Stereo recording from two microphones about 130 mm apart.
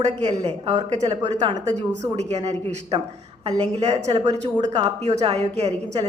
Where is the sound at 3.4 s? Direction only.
45° right (ahead or behind).